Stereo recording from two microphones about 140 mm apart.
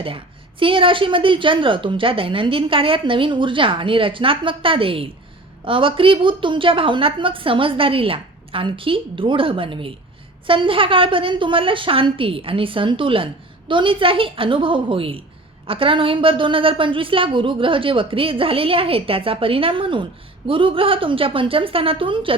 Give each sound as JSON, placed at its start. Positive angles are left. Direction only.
{"t": 0.6, "sound": "a woman's voice", "side_deg": -40}